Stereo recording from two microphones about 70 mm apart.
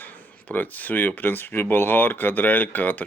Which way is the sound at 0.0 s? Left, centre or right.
Left.